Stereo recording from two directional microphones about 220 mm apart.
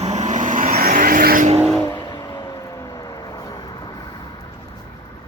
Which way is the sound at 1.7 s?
15° left (ahead or behind).